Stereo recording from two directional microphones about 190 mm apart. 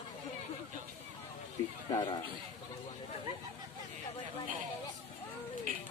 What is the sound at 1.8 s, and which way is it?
Speech, 25° left (ahead or behind).